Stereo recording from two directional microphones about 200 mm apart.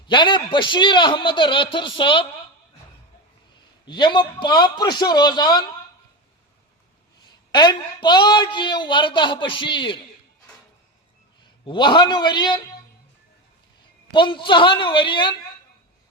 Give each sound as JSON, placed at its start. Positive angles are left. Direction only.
{"t": 0.1, "sound": "a woman's voice", "side_deg": 25}
{"t": 3.8, "sound": "a woman's voice", "side_deg": 20}
{"t": 7.5, "sound": "a woman's voice", "side_deg": 20}
{"t": 11.4, "sound": "a woman's voice", "side_deg": 25}
{"t": 14.1, "sound": "a woman's voice", "side_deg": 25}